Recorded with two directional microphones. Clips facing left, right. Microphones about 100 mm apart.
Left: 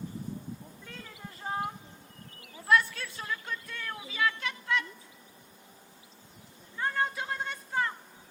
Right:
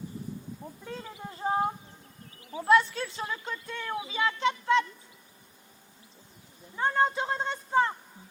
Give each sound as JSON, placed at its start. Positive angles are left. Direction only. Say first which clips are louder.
{"t": 0.9, "sound": "a sound", "louder": "right 7 dB", "side_deg": -25}
{"t": 2.5, "sound": "speech", "louder": "right 4 dB", "side_deg": -20}
{"t": 6.7, "sound": "speech", "louder": "right 5 dB", "side_deg": -25}